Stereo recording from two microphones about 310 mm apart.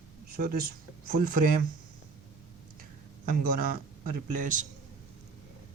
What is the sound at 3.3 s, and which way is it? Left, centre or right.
A man's voice, right.